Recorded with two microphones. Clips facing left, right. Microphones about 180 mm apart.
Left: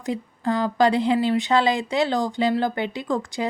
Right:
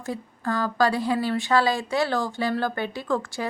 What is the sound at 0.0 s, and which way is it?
A woman's voice, 20° left (ahead or behind).